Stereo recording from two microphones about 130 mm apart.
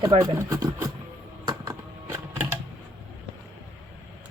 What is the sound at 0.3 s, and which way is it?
Speech, 20° right (ahead or behind).